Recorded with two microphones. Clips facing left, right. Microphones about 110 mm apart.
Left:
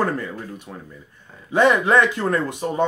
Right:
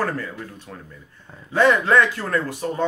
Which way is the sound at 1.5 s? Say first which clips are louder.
Left 1 dB; 15° left (ahead or behind).